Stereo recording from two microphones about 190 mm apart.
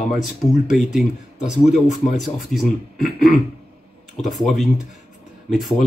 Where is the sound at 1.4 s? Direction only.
40° left (ahead or behind).